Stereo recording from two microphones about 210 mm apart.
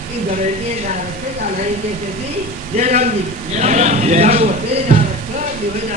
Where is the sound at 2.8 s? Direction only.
35° right (ahead or behind).